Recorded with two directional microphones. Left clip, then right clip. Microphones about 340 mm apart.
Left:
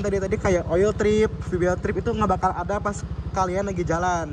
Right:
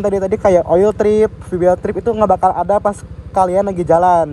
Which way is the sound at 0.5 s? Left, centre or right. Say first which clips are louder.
Right 10 dB; centre.